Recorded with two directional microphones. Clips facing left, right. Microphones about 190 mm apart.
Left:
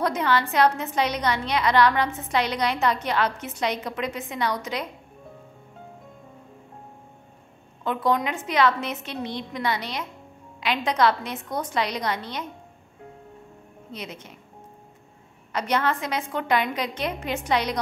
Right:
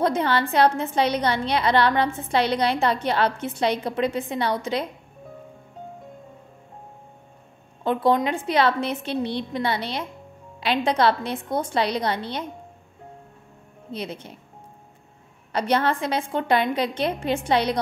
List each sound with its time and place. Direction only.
0.0 s a woman's voice: 30° right (ahead or behind)
7.8 s a woman's voice: 30° right (ahead or behind)
13.9 s a woman's voice: 30° right (ahead or behind)
15.5 s a woman's voice: 30° right (ahead or behind)